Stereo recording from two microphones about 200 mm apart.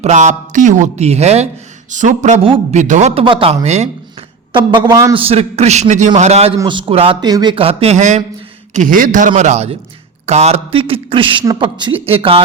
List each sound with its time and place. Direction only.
0.0 s a man's voice: 35° right (ahead or behind)
4.5 s a man's voice: 20° right (ahead or behind)